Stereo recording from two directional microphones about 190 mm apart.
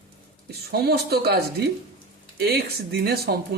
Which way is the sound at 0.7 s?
55° right (ahead or behind).